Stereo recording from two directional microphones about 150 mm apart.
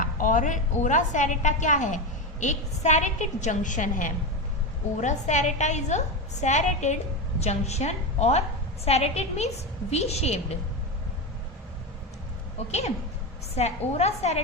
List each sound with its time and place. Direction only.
0.0 s a woman's voice: 65° left (ahead or behind); by 10.4 s 45° left (ahead or behind)
13.6 s a woman's voice: 45° left (ahead or behind)